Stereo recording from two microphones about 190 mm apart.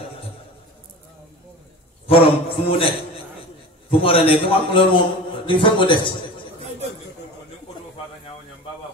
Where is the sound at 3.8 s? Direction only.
30° left (ahead or behind).